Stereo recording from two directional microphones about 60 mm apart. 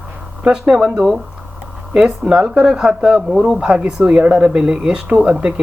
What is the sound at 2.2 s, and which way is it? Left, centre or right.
Speech, centre.